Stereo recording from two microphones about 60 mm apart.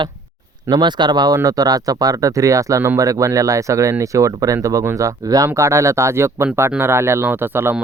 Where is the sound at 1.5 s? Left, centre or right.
Right.